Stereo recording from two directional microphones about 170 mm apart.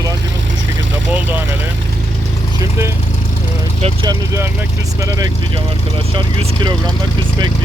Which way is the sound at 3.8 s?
30° right (ahead or behind).